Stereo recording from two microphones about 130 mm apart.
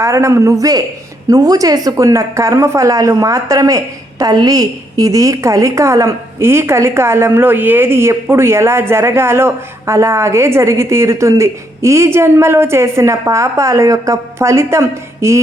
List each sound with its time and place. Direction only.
0.0 s a woman's voice: 25° right (ahead or behind)